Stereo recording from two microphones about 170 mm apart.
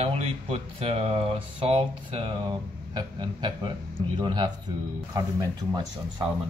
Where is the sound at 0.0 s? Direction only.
40° right (ahead or behind); by 5.9 s 20° right (ahead or behind).